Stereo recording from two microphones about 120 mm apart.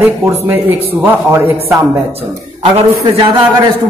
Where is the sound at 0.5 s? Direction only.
15° right (ahead or behind).